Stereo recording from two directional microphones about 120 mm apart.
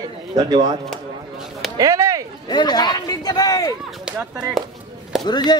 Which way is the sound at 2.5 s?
35° left (ahead or behind).